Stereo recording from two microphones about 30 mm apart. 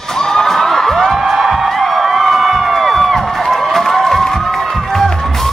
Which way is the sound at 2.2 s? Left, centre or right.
Centre.